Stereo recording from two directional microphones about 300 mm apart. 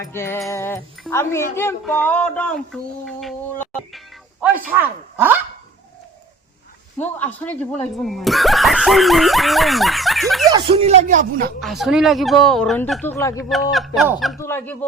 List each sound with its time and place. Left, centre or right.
0.0 s speech: centre
7.0 s speech: centre
10.5 s a man's voice: centre
11.6 s speech: centre